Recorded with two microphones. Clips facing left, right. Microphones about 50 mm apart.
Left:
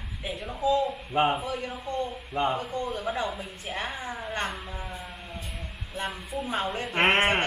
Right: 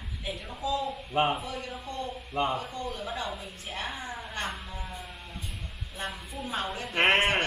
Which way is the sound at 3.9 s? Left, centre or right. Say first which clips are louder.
Left 2 dB; centre.